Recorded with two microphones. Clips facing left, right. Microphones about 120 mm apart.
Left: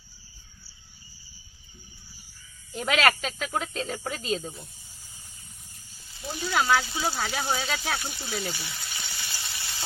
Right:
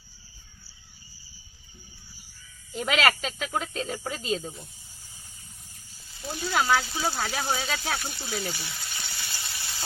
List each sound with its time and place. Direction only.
2.7 s speech: 5° right (ahead or behind)
6.3 s speech: centre (ahead or behind)